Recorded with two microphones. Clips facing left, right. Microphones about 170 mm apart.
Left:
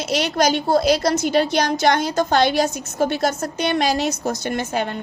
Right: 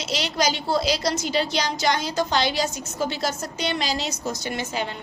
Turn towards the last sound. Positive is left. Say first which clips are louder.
# left 5 dB
turn(degrees=50)  # may be behind; listen again after turning